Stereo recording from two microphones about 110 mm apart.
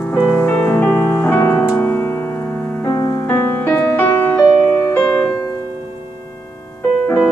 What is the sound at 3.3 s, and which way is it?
Music, 15° left (ahead or behind).